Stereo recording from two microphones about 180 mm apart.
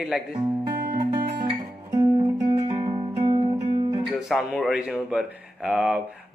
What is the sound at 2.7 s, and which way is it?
Music, 25° right (ahead or behind).